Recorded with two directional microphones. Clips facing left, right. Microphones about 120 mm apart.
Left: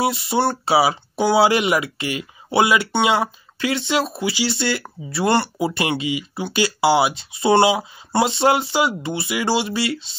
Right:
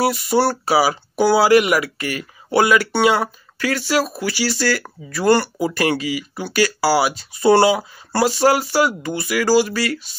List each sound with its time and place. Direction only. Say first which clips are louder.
0.0 s speech: right 2 dB; 25° left (ahead or behind)